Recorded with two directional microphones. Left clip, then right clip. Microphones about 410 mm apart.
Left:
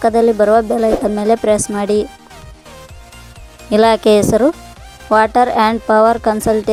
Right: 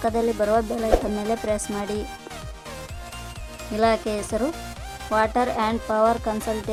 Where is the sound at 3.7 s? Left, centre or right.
Centre.